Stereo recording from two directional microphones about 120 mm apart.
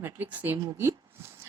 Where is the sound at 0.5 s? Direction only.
25° right (ahead or behind).